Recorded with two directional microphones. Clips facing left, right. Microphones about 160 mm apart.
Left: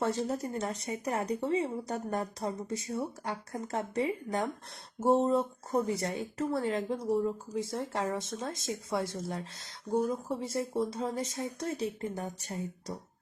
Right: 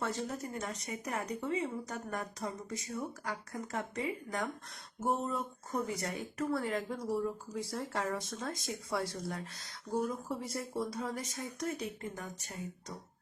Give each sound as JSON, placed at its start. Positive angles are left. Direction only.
{"t": 0.0, "sound": "speech", "side_deg": 35}